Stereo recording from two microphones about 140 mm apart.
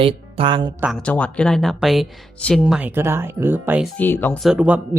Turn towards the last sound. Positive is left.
turn(degrees=-5)  # may be behind; listen again after turning